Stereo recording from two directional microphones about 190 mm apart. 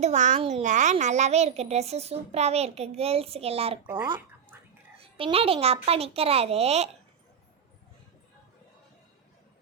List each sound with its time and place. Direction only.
0.0 s a child's voice: 40° right (ahead or behind)
4.5 s whispering: 10° right (ahead or behind)
4.9 s a child's voice: 30° right (ahead or behind)